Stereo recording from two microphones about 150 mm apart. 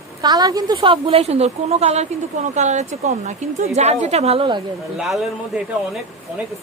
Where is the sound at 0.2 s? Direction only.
25° right (ahead or behind).